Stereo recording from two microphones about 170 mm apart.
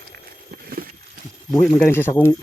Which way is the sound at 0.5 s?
60° right (ahead or behind).